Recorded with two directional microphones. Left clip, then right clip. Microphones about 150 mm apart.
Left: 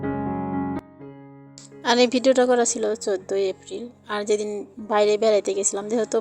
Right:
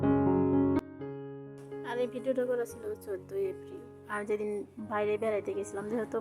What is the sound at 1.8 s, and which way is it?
Speech, 55° left (ahead or behind).